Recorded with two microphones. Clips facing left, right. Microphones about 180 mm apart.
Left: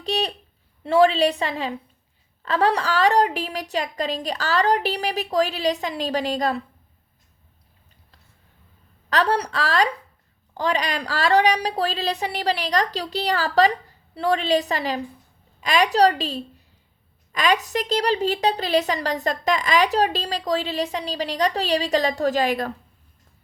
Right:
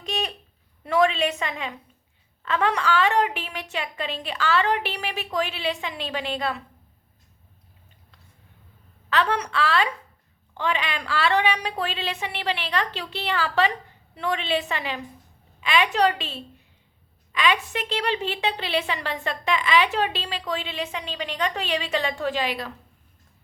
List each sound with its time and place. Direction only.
0.0 s a sound: 30° left (ahead or behind)
0.9 s a woman's voice: 30° left (ahead or behind)
9.0 s a woman's voice: 40° left (ahead or behind)